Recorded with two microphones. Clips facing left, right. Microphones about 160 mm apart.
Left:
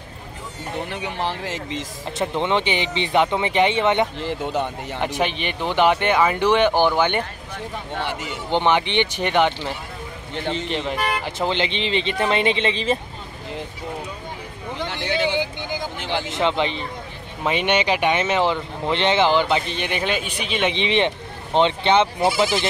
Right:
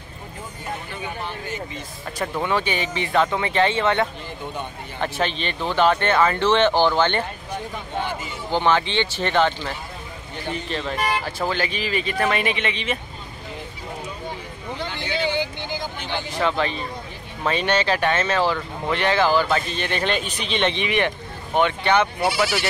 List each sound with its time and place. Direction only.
0.7 s speech: 80° left
2.1 s speech: 25° left (ahead or behind)
4.2 s speech: 85° left
5.0 s speech: 15° left (ahead or behind)
8.0 s speech: 75° left (ahead or behind)
8.5 s speech: 20° left (ahead or behind)
14.9 s vehicle: 70° left (ahead or behind)
16.0 s speech: 90° left
16.3 s speech: 20° left (ahead or behind)
20.7 s speech: 25° left (ahead or behind)